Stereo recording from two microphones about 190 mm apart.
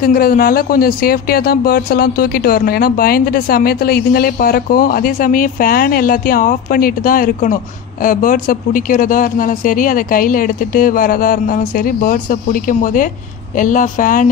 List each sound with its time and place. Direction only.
0.0 s speech: 50° left (ahead or behind)